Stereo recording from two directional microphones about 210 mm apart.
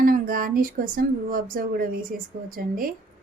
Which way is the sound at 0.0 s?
45° right (ahead or behind).